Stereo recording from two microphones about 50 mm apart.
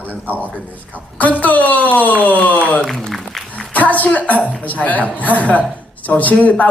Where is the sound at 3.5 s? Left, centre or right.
Left.